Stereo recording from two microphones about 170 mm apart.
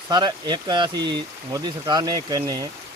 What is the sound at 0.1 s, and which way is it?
Speech, 25° right (ahead or behind).